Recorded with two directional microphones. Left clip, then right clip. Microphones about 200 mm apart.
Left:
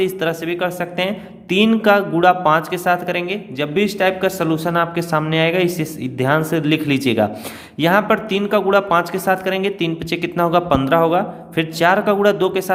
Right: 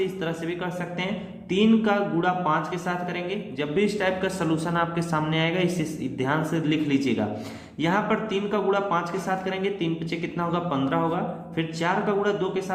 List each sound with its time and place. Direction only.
0.0 s a man's voice: 50° left (ahead or behind)